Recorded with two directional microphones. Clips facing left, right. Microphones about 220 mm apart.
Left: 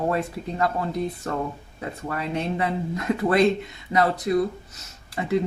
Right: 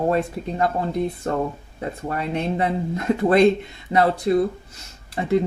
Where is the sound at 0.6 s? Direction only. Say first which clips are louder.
Right 3 dB; 30° right (ahead or behind).